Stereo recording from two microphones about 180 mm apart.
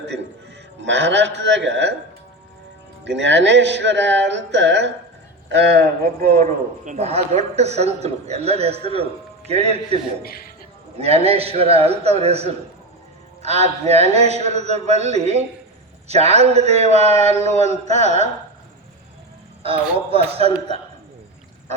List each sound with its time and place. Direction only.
0.8 s a man's voice: 80° right
3.0 s speech: 80° right
5.5 s a man's voice: 65° right (ahead or behind); by 17.3 s 35° right (ahead or behind)
17.3 s a sound: 40° left (ahead or behind)
17.6 s a man's voice: 40° right (ahead or behind)
20.3 s a man's voice: 35° right (ahead or behind)